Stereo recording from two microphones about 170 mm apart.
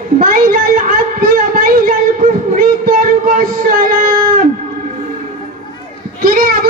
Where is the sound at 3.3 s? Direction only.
55° right (ahead or behind).